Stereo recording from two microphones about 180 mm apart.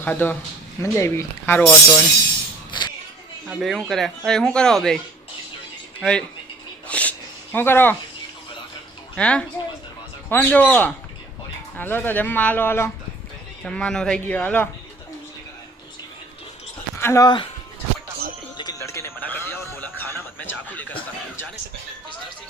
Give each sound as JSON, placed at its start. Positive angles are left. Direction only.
{"t": 0.0, "sound": "speech", "side_deg": 10}
{"t": 2.7, "sound": "a sound", "side_deg": 25}
{"t": 3.5, "sound": "a man's voice", "side_deg": 0}
{"t": 6.0, "sound": "speech", "side_deg": 5}
{"t": 6.8, "sound": "a sound", "side_deg": 5}
{"t": 9.1, "sound": "a man's voice", "side_deg": 5}
{"t": 17.0, "sound": "speech", "side_deg": 15}
{"t": 18.5, "sound": "music", "side_deg": 20}
{"t": 20.0, "sound": "a sound", "side_deg": 15}